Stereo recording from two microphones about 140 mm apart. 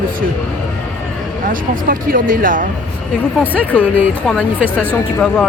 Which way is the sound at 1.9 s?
85° right.